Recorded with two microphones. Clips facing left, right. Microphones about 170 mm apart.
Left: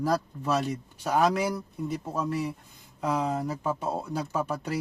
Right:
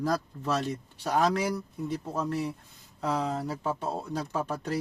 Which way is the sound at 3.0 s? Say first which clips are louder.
Left 2 dB; 10° left (ahead or behind).